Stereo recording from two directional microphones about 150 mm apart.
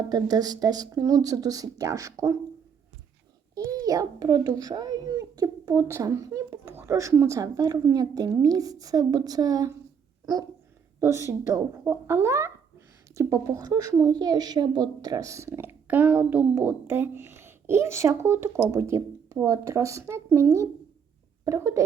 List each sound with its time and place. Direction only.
0.1 s a woman's voice: 25° right (ahead or behind)
3.5 s a sound: 25° right (ahead or behind)
6.7 s a woman's voice: 20° right (ahead or behind)
11.0 s a woman's voice: 20° right (ahead or behind)